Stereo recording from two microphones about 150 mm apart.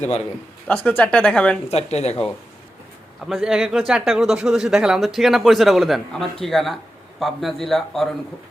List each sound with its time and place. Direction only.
0.7 s speech: 10° left (ahead or behind)
1.7 s speech: 45° left (ahead or behind)
3.2 s speech: 5° right (ahead or behind)